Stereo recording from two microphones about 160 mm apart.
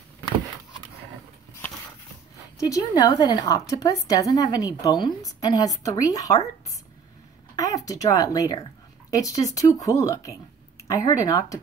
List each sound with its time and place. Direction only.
2.6 s a woman's voice: 25° left (ahead or behind)
7.5 s a woman's voice: 20° left (ahead or behind)